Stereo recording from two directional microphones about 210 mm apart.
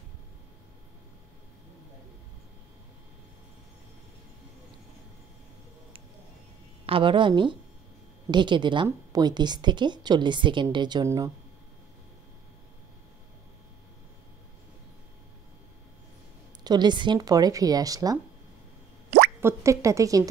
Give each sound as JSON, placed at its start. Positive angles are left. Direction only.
{"t": 6.9, "sound": "a woman's voice", "side_deg": -25}
{"t": 16.6, "sound": "speech", "side_deg": -20}
{"t": 19.0, "sound": "drip", "side_deg": -50}
{"t": 19.4, "sound": "speech", "side_deg": -15}